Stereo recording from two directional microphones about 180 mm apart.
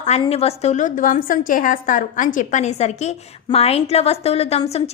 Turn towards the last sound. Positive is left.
turn(degrees=35)  # may be behind; listen again after turning